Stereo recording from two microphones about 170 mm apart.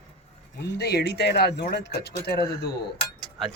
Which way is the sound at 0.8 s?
70° left (ahead or behind).